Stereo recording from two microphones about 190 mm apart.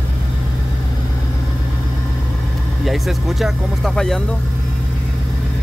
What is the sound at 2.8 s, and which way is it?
Speech, centre (ahead or behind).